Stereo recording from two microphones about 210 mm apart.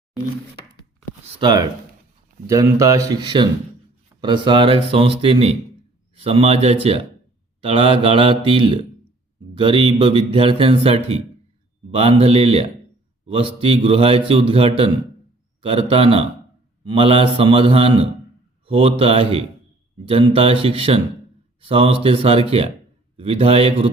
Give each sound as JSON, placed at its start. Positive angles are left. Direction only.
{"t": 1.4, "sound": "a man's voice", "side_deg": -20}